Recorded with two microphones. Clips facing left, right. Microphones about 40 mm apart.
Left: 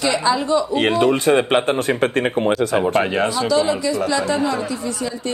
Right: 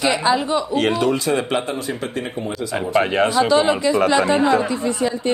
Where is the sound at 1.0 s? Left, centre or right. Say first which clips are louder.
Left 4 dB; left.